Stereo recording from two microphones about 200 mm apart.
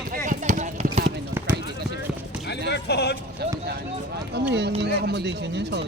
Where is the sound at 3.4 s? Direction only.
55° right (ahead or behind).